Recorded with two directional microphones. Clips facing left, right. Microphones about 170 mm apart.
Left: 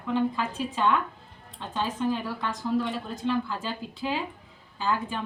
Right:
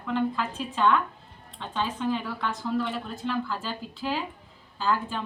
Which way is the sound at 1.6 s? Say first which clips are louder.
Left 1 dB; 10° left (ahead or behind).